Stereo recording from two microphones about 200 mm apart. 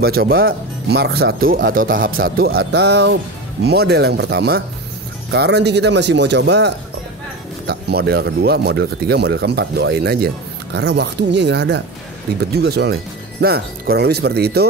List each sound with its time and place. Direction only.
0.0 s speech: 50° right (ahead or behind)